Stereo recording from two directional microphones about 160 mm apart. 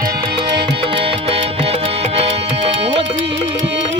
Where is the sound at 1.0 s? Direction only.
35° right (ahead or behind).